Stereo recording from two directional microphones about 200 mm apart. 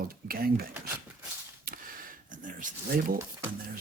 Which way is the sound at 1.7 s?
45° right (ahead or behind).